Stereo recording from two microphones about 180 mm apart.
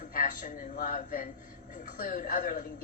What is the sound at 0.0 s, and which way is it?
A woman's voice, 50° left (ahead or behind).